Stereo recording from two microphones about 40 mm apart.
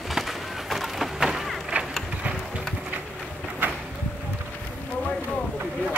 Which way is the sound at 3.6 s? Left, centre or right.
Right.